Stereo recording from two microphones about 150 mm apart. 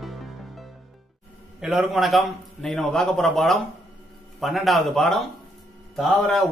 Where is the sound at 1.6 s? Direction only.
Centre (ahead or behind).